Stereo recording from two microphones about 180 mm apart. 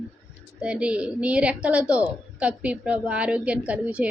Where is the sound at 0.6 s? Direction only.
5° right (ahead or behind).